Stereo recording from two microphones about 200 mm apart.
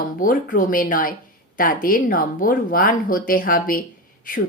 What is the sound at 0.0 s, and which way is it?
A woman's voice, 40° left (ahead or behind).